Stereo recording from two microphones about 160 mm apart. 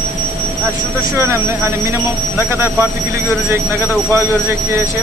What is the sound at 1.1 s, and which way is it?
Speech, 15° right (ahead or behind).